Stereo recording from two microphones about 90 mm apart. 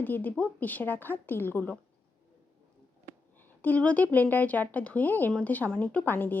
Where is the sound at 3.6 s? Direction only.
15° left (ahead or behind).